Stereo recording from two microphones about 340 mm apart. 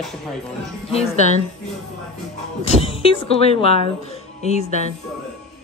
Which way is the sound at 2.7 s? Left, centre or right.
Centre.